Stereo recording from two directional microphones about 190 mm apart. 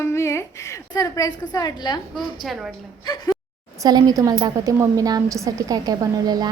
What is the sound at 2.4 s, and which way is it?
Speech, centre (ahead or behind).